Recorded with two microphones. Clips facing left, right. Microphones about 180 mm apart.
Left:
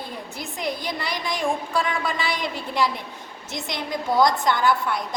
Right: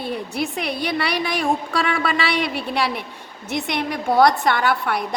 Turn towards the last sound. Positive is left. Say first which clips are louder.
# right 1 dB
turn(degrees=-65)  # may be behind; listen again after turning